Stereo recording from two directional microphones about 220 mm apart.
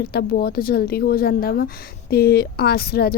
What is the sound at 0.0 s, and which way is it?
Speech, 45° left (ahead or behind).